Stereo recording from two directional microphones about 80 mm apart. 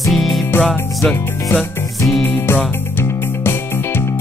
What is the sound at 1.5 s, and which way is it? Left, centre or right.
Music, left.